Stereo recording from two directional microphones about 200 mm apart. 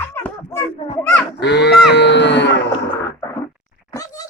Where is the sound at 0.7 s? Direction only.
25° left (ahead or behind).